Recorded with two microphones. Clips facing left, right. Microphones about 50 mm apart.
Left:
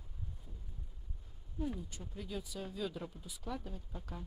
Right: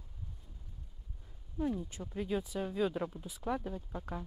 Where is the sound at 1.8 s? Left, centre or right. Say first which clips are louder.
Right 7 dB; right.